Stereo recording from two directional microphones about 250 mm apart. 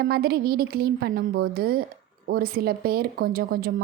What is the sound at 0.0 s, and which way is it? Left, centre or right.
A woman's voice, right.